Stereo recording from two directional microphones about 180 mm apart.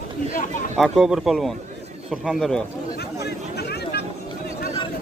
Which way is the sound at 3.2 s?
65° left (ahead or behind).